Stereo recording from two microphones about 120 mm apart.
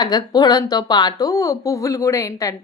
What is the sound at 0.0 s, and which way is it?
A woman's voice, 35° left (ahead or behind).